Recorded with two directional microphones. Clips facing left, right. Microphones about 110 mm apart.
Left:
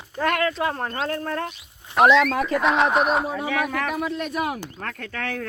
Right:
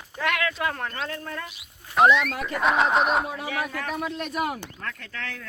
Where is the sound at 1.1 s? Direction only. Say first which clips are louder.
Left 7 dB; 50° left (ahead or behind).